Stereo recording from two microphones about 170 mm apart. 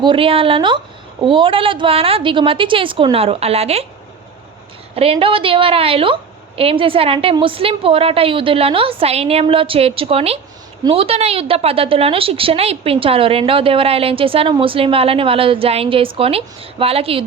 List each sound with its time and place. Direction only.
0.0 s a woman's voice: 30° right (ahead or behind)
4.9 s a woman's voice: 35° right (ahead or behind)